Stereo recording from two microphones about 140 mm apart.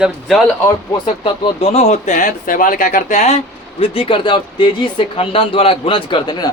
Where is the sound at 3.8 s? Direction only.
40° left (ahead or behind).